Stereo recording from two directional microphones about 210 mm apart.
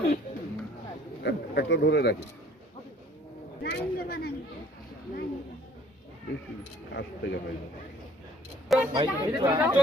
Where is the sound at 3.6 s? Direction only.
50° left (ahead or behind).